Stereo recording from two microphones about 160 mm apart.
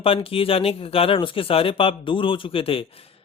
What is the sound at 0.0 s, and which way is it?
Speech, 35° left (ahead or behind).